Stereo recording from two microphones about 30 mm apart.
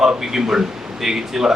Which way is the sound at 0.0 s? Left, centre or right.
Centre.